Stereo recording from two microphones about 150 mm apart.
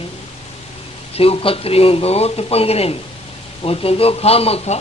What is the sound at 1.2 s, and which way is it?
A man's voice, 40° left (ahead or behind).